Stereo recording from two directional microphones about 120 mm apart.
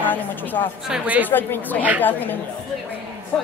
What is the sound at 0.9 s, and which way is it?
Speech, 10° right (ahead or behind).